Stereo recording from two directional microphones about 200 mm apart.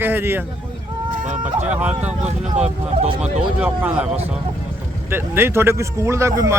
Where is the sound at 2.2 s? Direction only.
35° right (ahead or behind).